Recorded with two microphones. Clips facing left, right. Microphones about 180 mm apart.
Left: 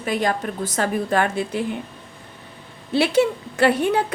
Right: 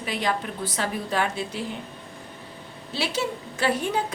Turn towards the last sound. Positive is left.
turn(degrees=60)  # may be behind; listen again after turning